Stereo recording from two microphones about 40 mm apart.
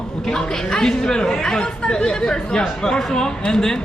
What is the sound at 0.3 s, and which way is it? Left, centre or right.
A man's voice, centre.